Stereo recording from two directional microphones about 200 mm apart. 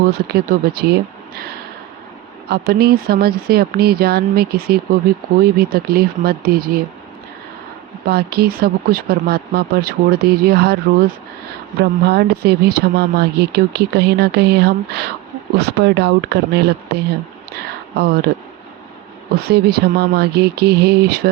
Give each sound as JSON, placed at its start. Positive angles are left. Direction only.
{"t": 0.1, "sound": "speech", "side_deg": -50}
{"t": 2.5, "sound": "speech", "side_deg": -50}
{"t": 8.0, "sound": "speech", "side_deg": -50}
{"t": 11.8, "sound": "speech", "side_deg": -55}
{"t": 19.3, "sound": "speech", "side_deg": -50}